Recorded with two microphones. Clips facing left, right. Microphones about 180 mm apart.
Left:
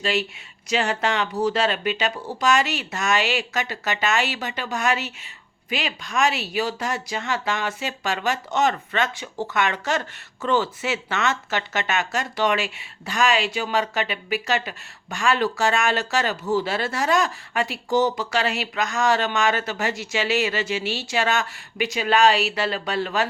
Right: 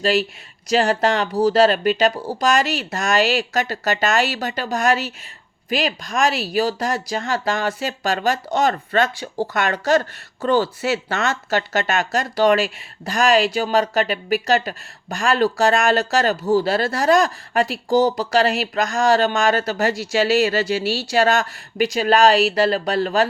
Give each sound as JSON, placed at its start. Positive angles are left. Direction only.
{"t": 0.0, "sound": "speech", "side_deg": -40}